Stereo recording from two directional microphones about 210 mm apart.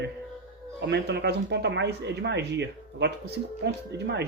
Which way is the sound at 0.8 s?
55° right (ahead or behind).